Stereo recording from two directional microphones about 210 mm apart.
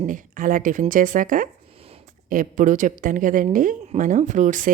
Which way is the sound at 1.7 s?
30° right (ahead or behind).